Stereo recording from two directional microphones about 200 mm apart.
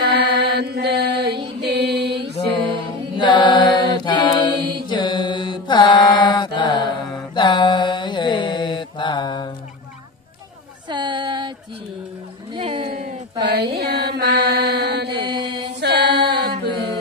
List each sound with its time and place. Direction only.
0.4 s mantra: 55° right (ahead or behind)
3.2 s mantra: 20° left (ahead or behind)
10.9 s a sound: 25° right (ahead or behind)
12.5 s a sound: 25° right (ahead or behind)
13.4 s music: 55° right (ahead or behind)
14.7 s mantra: 55° right (ahead or behind)
15.0 s mantra: 20° right (ahead or behind)
15.8 s a capella: 55° right (ahead or behind)